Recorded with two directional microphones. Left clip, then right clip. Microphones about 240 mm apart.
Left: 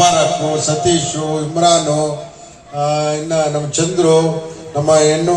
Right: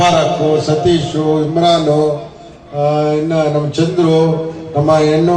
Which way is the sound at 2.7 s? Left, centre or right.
Left.